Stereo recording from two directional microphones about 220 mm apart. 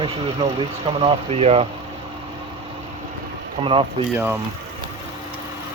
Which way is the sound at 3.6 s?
25° right (ahead or behind).